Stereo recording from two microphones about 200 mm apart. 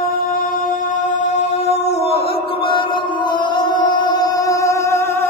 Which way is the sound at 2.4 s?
25° left (ahead or behind).